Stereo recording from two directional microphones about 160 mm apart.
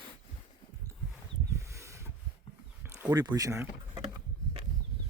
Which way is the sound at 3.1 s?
25° right (ahead or behind).